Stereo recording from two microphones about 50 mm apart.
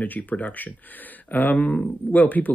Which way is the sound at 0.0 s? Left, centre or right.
Left.